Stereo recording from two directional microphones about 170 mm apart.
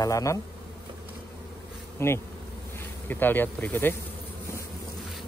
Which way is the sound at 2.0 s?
15° left (ahead or behind).